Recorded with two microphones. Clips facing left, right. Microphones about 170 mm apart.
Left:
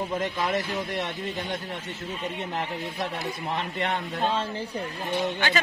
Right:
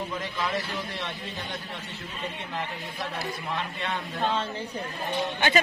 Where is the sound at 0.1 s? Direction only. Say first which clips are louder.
Left 4 dB; 45° left (ahead or behind).